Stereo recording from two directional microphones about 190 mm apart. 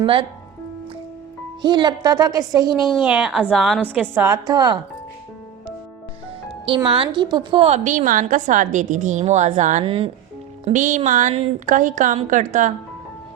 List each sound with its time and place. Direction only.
0.0 s a woman's voice: 25° right (ahead or behind)
1.6 s a woman's voice: 25° right (ahead or behind)
3.0 s a woman's voice: 5° right (ahead or behind)
4.1 s a woman's voice: 15° right (ahead or behind)
6.7 s a woman's voice: 25° right (ahead or behind)
10.7 s a woman's voice: 40° right (ahead or behind)